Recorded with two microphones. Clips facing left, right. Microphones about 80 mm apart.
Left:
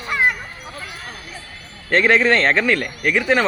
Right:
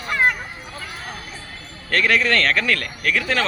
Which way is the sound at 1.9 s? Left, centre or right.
Left.